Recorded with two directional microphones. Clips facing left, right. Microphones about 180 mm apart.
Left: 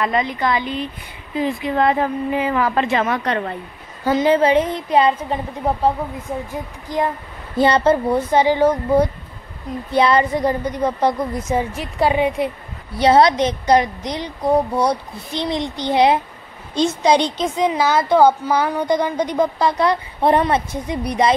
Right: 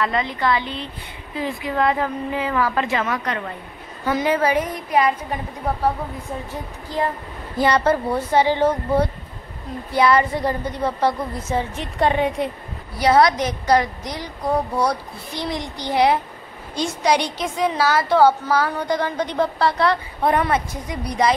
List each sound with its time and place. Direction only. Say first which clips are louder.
0.0 s a woman's voice: left 2 dB; 15° left (ahead or behind)
6.9 s a woman's voice: left 2 dB; 15° left (ahead or behind)
13.0 s a woman's voice: left 3 dB; 25° left (ahead or behind)